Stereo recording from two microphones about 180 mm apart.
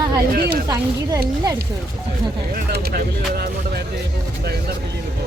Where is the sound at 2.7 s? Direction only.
60° right (ahead or behind).